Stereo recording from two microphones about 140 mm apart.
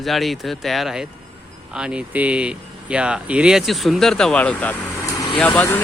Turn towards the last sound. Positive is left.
turn(degrees=10)  # may be behind; listen again after turning